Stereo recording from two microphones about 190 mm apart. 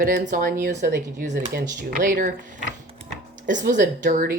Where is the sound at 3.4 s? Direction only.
40° right (ahead or behind).